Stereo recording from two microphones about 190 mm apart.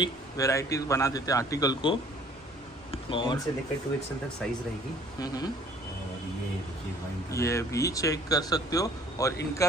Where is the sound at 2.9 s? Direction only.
25° left (ahead or behind).